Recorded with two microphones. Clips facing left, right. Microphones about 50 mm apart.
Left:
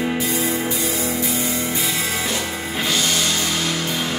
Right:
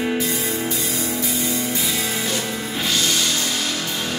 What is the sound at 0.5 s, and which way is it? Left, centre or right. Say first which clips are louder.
Music: left 2 dB; left.